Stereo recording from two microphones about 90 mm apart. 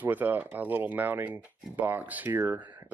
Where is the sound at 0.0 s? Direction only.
20° right (ahead or behind).